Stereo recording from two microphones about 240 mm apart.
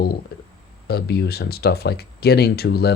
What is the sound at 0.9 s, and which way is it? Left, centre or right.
Speech, left.